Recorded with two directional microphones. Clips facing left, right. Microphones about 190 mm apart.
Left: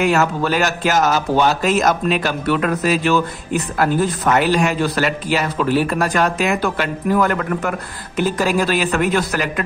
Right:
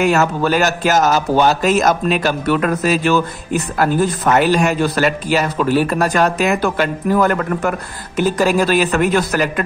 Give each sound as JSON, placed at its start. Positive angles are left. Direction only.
{"t": 0.0, "sound": "a man's voice", "side_deg": -45}
{"t": 4.4, "sound": "a man's voice", "side_deg": -45}